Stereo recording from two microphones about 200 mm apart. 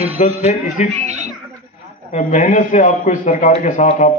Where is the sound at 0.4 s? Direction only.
35° left (ahead or behind).